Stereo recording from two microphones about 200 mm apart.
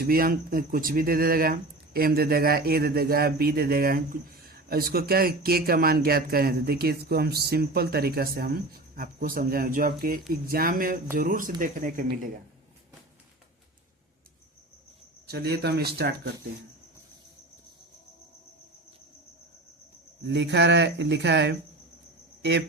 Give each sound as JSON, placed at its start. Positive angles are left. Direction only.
{"t": 0.0, "sound": "speech", "side_deg": -45}
{"t": 15.3, "sound": "speech", "side_deg": -55}
{"t": 20.2, "sound": "speech", "side_deg": -60}